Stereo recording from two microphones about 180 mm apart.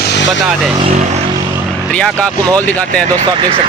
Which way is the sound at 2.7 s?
5° left (ahead or behind).